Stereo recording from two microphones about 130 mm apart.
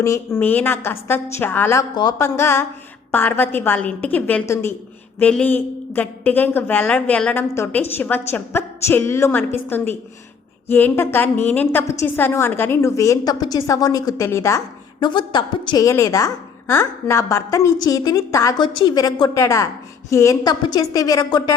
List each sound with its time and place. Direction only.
0.0 s a woman's voice: 20° left (ahead or behind)
2.0 s a woman's voice: 25° left (ahead or behind)
5.2 s a woman's voice: 10° left (ahead or behind)
15.0 s a woman's voice: 35° left (ahead or behind)
18.6 s a woman's voice: 35° left (ahead or behind)